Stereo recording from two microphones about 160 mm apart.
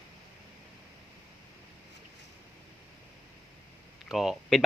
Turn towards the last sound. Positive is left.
turn(degrees=0)  # may be behind; listen again after turning